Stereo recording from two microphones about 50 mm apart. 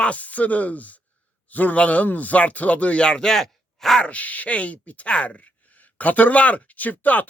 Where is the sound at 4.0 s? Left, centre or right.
Left.